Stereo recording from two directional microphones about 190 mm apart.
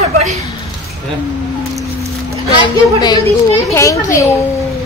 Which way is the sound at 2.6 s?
20° left (ahead or behind).